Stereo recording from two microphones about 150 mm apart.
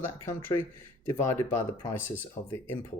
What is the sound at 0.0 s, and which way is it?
Speech, 15° left (ahead or behind).